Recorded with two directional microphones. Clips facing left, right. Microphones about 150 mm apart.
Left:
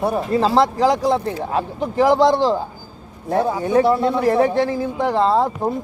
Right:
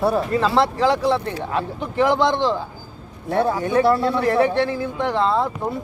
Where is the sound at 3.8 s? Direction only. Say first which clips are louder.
Left 1 dB; 20° left (ahead or behind).